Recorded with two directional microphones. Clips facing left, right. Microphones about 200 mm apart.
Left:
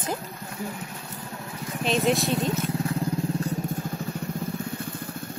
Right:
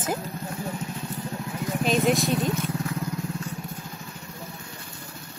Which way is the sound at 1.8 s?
Centre (ahead or behind).